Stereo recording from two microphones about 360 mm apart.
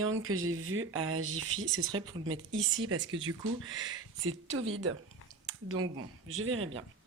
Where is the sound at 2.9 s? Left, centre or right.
Centre.